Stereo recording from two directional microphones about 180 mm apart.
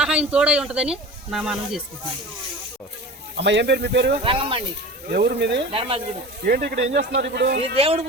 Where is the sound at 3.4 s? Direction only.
70° right (ahead or behind).